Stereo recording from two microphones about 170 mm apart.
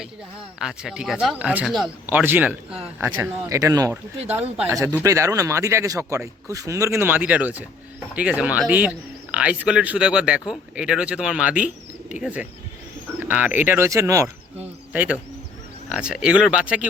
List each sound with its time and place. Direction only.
0.6 s speech: 5° right (ahead or behind)
2.0 s speech: 10° right (ahead or behind)